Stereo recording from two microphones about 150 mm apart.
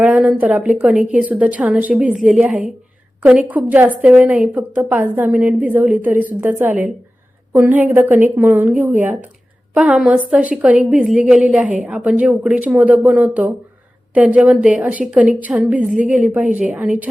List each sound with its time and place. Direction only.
0.0 s a woman's voice: 10° right (ahead or behind)